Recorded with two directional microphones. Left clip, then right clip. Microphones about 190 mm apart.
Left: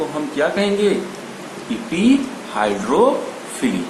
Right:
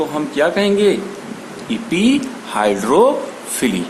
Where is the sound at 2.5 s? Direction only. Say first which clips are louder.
Right 3 dB; 55° right (ahead or behind).